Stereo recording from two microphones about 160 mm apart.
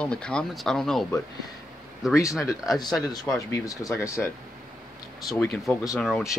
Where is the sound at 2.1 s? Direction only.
20° left (ahead or behind).